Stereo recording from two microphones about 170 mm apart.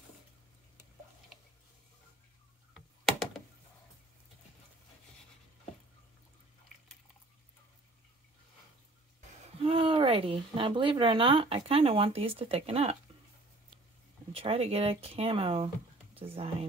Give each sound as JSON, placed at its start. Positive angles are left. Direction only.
{"t": 2.7, "sound": "computer keyboard", "side_deg": 0}
{"t": 9.6, "sound": "speech", "side_deg": -35}
{"t": 14.3, "sound": "speech", "side_deg": -35}